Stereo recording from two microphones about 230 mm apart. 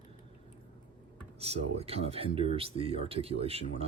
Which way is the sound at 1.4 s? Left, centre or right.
Right.